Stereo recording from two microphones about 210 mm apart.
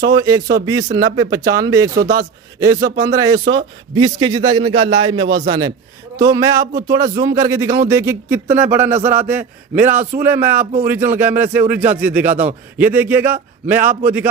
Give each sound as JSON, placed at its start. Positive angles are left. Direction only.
{"t": 0.1, "sound": "a man's voice", "side_deg": -15}